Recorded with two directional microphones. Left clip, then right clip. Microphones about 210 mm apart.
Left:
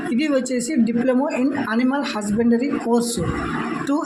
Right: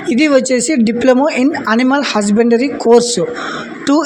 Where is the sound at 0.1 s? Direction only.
40° right (ahead or behind).